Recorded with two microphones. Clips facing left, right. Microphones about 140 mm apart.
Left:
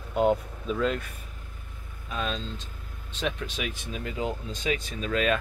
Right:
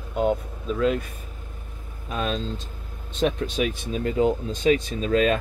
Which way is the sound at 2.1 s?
40° right (ahead or behind).